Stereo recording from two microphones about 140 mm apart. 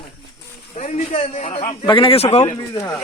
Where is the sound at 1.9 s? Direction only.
40° left (ahead or behind).